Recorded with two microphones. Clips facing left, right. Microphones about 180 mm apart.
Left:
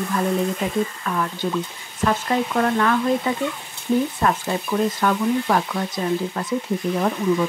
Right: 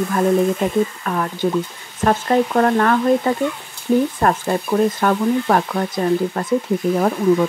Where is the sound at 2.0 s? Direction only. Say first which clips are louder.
Right 5 dB; 45° right (ahead or behind).